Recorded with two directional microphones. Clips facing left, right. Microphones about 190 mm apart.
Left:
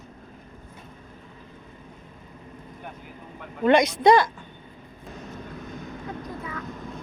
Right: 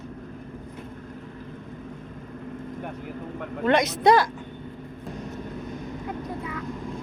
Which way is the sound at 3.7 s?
5° right (ahead or behind).